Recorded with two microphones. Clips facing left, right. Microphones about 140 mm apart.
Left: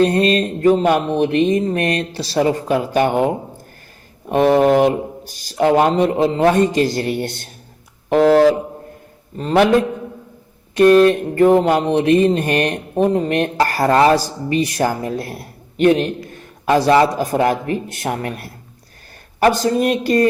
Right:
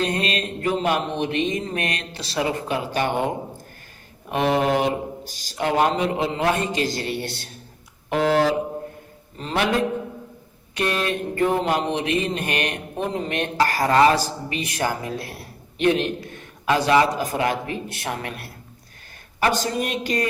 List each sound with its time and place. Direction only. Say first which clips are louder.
0.0 s speech: left 10 dB; 40° left (ahead or behind)
4.3 s mantra: left 8 dB; 45° left (ahead or behind)
10.8 s mantra: left 14 dB; 45° left (ahead or behind)
16.6 s mantra: left 5 dB; 40° left (ahead or behind)